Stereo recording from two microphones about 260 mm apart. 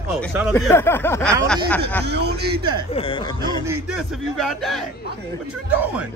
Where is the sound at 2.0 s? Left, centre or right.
Right.